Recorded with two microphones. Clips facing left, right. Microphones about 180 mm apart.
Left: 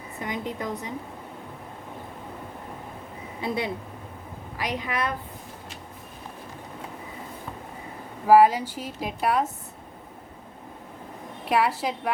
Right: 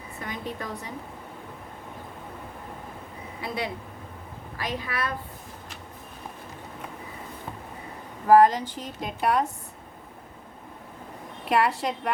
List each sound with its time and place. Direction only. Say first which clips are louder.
0.2 s a woman's voice: left 3 dB; 20° left (ahead or behind)
3.4 s speech: left 3 dB; 25° left (ahead or behind)
8.3 s speech: left 1 dB; 10° left (ahead or behind)
11.4 s a woman's voice: even; centre (ahead or behind)